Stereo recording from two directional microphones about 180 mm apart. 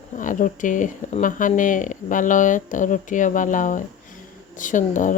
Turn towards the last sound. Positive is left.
turn(degrees=45)  # may be behind; listen again after turning